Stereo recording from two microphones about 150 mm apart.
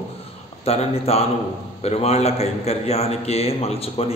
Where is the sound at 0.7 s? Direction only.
45° left (ahead or behind).